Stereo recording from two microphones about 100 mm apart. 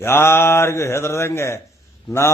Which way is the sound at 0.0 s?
25° left (ahead or behind).